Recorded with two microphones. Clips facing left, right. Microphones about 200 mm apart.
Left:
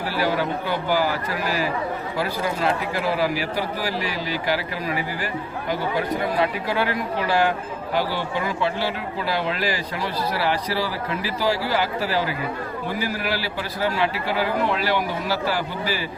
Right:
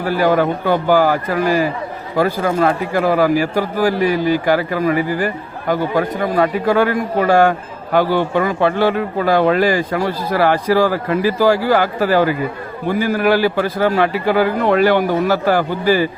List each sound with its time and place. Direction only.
0.0 s speech: 50° right (ahead or behind)